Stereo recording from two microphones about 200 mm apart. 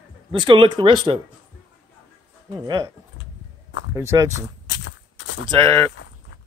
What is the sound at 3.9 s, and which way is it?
Speech, 15° right (ahead or behind).